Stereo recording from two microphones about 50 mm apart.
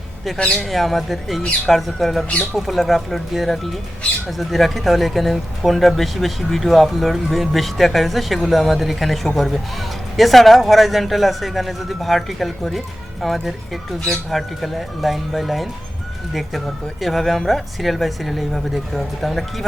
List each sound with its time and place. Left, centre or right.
0.3 s speech: left
0.6 s speech: centre